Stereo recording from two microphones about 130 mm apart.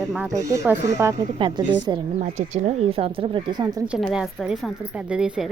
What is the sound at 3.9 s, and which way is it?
Speech, 5° right (ahead or behind).